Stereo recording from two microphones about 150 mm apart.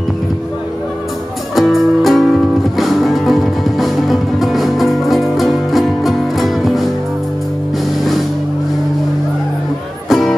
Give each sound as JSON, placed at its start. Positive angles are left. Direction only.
{"t": 1.5, "sound": "music", "side_deg": 0}
{"t": 10.0, "sound": "music", "side_deg": 0}